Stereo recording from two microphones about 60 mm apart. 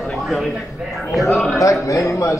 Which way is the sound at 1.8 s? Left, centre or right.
Left.